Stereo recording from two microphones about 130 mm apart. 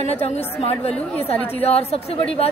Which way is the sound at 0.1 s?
55° left (ahead or behind).